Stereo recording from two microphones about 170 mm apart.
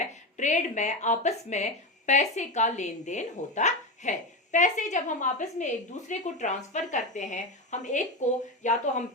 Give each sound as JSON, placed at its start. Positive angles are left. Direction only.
{"t": 0.0, "sound": "speech", "side_deg": 45}